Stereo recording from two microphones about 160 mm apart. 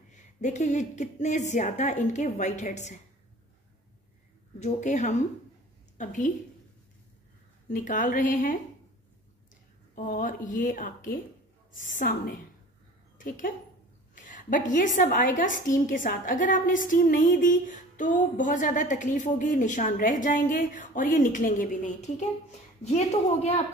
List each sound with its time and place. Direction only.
0.1 s a woman's voice: 45° left (ahead or behind)
4.6 s a woman's voice: 45° left (ahead or behind)
7.7 s speech: 55° left (ahead or behind)
9.9 s speech: 50° left (ahead or behind)
14.1 s a woman's voice: 55° left (ahead or behind)